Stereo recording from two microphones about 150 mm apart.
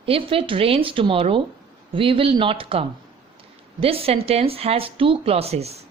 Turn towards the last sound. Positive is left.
turn(degrees=-45)  # may be behind; listen again after turning